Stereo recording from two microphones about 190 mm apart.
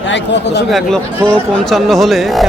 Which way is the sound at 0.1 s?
65° left (ahead or behind).